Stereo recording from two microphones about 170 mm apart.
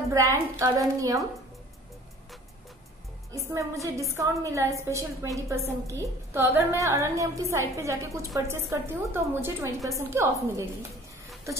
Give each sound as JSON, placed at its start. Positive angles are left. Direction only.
{"t": 0.1, "sound": "a woman's voice", "side_deg": -20}
{"t": 3.3, "sound": "a woman's voice", "side_deg": -15}